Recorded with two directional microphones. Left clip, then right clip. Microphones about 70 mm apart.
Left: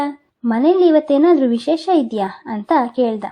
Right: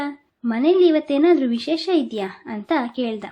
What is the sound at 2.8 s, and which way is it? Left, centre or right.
Speech, left.